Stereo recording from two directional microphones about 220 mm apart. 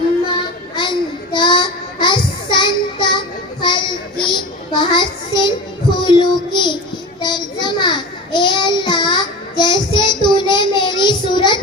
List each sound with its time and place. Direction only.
0.8 s child singing: 20° left (ahead or behind)